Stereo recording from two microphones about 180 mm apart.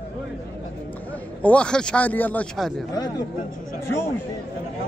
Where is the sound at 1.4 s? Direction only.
5° left (ahead or behind).